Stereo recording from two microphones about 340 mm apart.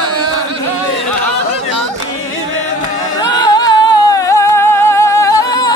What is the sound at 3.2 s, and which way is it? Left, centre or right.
Music, centre.